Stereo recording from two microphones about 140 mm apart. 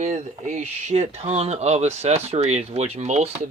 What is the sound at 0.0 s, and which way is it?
Speech, 55° right (ahead or behind).